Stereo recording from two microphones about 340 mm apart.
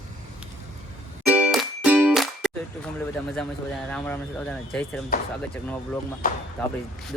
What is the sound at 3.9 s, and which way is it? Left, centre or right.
Speech, centre.